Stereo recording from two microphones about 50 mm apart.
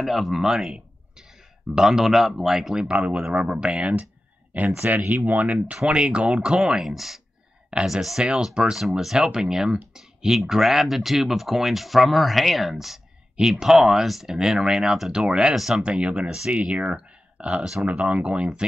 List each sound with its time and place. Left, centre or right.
0.0 s speech: centre; by 5.8 s right
5.9 s speech: right
15.8 s speech: right
17.6 s speech: centre
17.9 s speech: right